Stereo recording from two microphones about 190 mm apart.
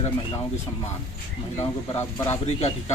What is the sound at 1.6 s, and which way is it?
Speech, 15° left (ahead or behind).